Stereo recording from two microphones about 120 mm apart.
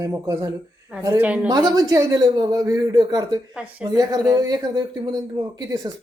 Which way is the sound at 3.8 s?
30° right (ahead or behind).